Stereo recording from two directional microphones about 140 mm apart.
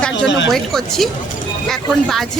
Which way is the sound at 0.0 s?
5° left (ahead or behind).